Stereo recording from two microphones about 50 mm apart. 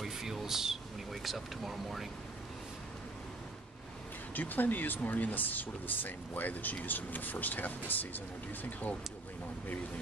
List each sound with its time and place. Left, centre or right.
0.0 s speech: centre
4.3 s speech: left